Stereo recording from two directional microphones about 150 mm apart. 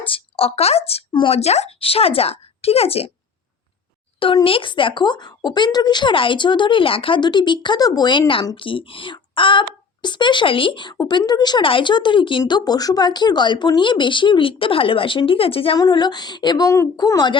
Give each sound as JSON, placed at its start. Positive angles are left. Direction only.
{"t": 0.1, "sound": "speech", "side_deg": 40}
{"t": 4.4, "sound": "speech", "side_deg": 35}
{"t": 15.8, "sound": "a woman's voice", "side_deg": 30}